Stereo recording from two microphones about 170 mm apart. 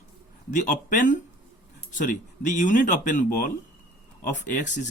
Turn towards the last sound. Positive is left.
turn(degrees=45)  # may be behind; listen again after turning